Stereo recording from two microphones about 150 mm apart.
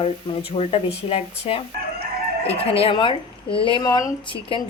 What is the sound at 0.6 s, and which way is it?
Speech, 40° left (ahead or behind).